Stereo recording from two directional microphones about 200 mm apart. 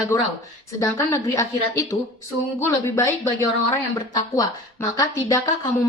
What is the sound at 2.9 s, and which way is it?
Speech, 15° left (ahead or behind).